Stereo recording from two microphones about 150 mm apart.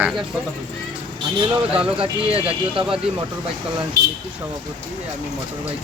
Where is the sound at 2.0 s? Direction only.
40° right (ahead or behind).